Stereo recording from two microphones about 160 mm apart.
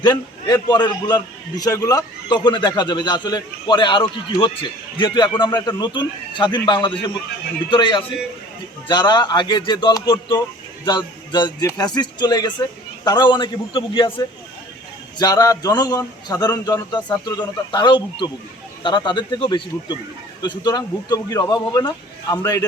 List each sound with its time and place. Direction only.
0.0 s a man's voice: 25° left (ahead or behind)
15.2 s a man's voice: 25° left (ahead or behind)